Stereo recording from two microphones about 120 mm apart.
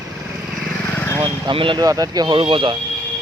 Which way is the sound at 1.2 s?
40° right (ahead or behind).